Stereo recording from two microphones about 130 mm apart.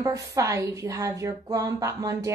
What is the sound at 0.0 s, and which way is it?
A woman's voice, 25° right (ahead or behind).